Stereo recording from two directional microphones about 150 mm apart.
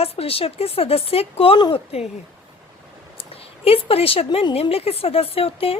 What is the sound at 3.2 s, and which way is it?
A woman's voice, 40° left (ahead or behind).